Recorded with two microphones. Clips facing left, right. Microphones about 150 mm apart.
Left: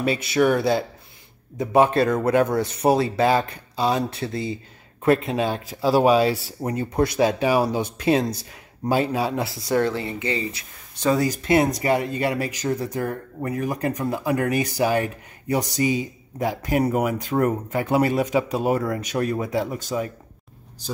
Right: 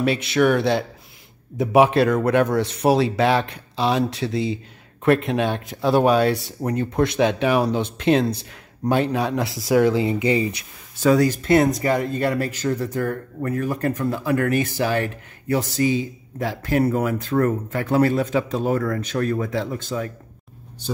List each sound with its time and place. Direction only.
0.3 s speech: centre (ahead or behind)
9.7 s speech: 10° right (ahead or behind)
11.0 s speech: centre (ahead or behind)
11.2 s speech: 10° left (ahead or behind)